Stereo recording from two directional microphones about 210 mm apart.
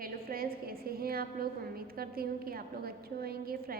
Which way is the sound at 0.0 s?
45° right (ahead or behind).